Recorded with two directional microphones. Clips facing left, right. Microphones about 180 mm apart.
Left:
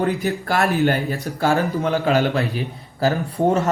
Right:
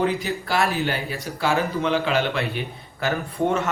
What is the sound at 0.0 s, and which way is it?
A man's voice, 50° left (ahead or behind).